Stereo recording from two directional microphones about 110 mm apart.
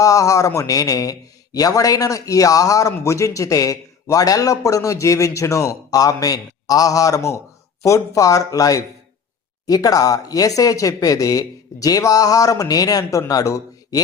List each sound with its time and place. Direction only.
0.0 s a man's voice: 30° left (ahead or behind)